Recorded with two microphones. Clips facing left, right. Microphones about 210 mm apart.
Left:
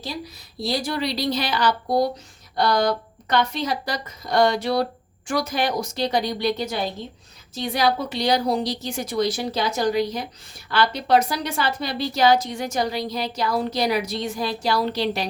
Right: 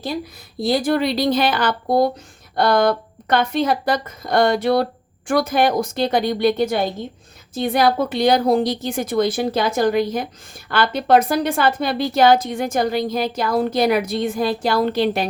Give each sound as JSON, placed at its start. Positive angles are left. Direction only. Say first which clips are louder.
{"t": 0.6, "sound": "a woman's voice", "louder": "right 7 dB", "side_deg": -55}